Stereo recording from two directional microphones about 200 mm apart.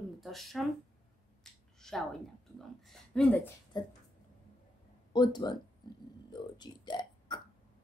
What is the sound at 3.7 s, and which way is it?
Speech, 20° left (ahead or behind).